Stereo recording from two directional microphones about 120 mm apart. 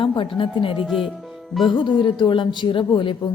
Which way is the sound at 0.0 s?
45° left (ahead or behind).